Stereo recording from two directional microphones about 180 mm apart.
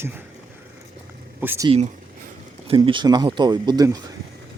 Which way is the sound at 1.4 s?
10° right (ahead or behind).